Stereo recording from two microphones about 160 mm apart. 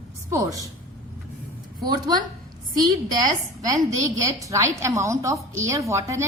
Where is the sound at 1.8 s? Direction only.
25° right (ahead or behind).